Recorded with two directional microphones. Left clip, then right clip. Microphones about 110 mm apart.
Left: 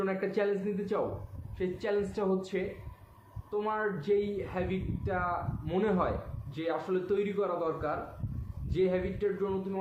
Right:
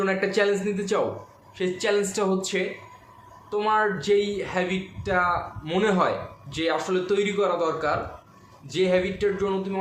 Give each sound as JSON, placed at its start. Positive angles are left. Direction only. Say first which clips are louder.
{"t": 0.0, "sound": "speech", "louder": "right 8 dB", "side_deg": -15}